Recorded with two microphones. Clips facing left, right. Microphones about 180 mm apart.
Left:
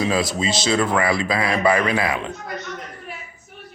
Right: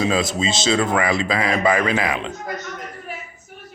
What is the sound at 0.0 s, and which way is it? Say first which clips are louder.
Speech: right 1 dB; 25° right (ahead or behind).